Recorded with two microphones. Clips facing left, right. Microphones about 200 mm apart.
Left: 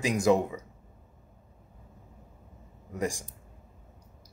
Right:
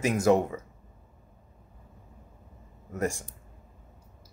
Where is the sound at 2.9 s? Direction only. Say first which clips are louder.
Right 2 dB; 10° left (ahead or behind).